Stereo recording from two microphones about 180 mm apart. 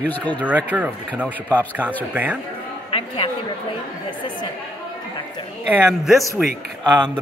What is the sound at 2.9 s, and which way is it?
A woman's voice, 30° left (ahead or behind).